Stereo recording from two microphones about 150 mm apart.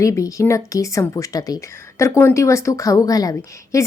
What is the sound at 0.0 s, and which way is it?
Speech, 20° left (ahead or behind).